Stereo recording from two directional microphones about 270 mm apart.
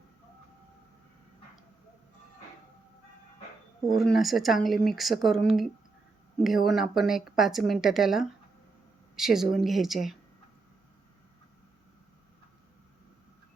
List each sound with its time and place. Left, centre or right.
3.8 s speech: centre